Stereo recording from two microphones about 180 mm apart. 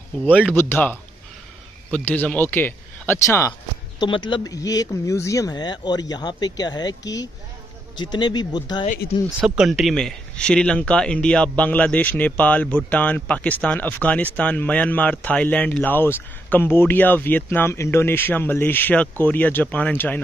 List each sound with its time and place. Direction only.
0.5 s a man's voice: 10° left (ahead or behind)
9.4 s a man's voice: 5° right (ahead or behind)